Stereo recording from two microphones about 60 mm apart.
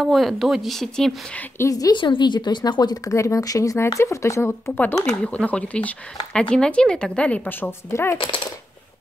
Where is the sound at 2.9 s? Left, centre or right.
Left.